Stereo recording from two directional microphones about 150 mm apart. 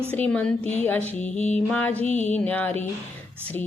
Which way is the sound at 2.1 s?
50° left (ahead or behind).